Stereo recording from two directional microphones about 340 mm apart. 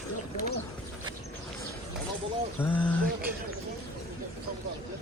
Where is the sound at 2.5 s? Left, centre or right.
Centre.